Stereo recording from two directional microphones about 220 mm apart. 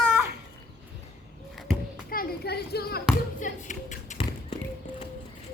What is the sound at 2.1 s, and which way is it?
Hands, 45° left (ahead or behind).